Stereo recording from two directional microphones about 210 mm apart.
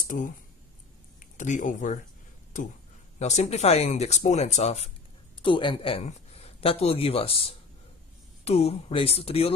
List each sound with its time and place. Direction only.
1.2 s speech: 35° left (ahead or behind)
3.2 s speech: 30° left (ahead or behind)